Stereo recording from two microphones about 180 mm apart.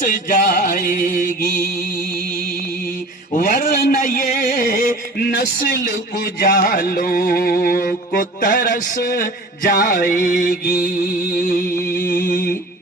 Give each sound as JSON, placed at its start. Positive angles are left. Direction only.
{"t": 0.0, "sound": "music", "side_deg": 45}
{"t": 3.3, "sound": "a sound", "side_deg": 50}
{"t": 6.4, "sound": "music", "side_deg": 55}